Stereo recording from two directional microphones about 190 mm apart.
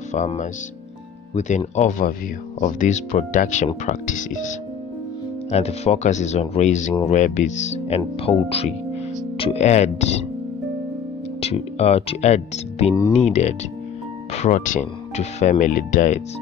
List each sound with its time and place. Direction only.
0.1 s speech: 40° left (ahead or behind)
11.4 s speech: 30° left (ahead or behind)